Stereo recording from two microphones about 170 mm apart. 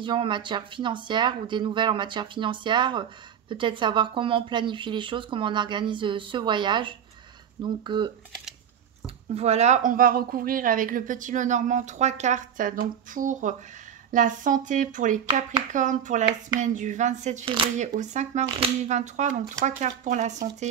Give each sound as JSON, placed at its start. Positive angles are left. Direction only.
{"t": 0.0, "sound": "speech", "side_deg": -30}